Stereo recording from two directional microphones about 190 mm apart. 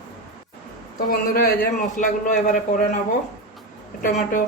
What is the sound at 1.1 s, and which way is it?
Speech, 50° left (ahead or behind).